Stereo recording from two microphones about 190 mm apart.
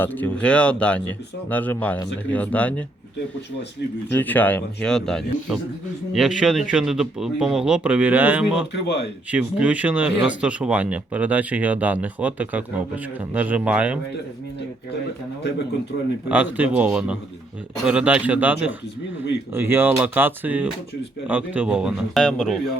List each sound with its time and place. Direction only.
0.0 s speech: 10° left (ahead or behind)
4.1 s speech: 10° left (ahead or behind)
8.7 s speech: 60° left (ahead or behind)
9.3 s speech: 5° right (ahead or behind)
16.3 s speech: 10° right (ahead or behind)